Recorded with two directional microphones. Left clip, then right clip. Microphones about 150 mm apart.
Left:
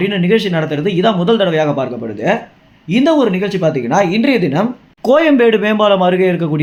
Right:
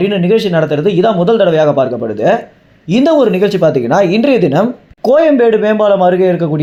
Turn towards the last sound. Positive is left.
turn(degrees=0)  # may be behind; listen again after turning